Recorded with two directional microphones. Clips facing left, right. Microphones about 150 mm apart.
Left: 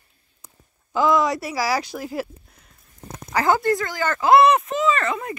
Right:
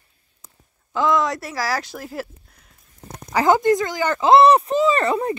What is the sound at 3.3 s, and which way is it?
Speech, 15° right (ahead or behind).